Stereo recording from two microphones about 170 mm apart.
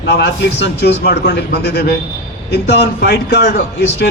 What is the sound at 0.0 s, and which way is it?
A man's voice, 80° left.